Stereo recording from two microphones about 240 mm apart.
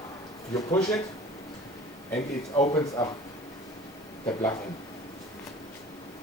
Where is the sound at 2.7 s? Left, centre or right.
Centre.